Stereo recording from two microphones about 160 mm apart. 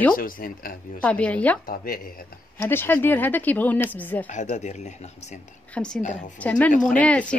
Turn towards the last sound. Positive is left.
turn(degrees=10)  # may be behind; listen again after turning